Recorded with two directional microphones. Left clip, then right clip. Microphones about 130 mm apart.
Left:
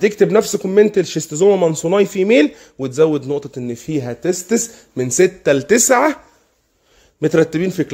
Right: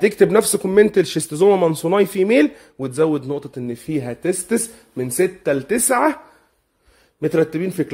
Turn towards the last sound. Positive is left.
turn(degrees=35)  # may be behind; listen again after turning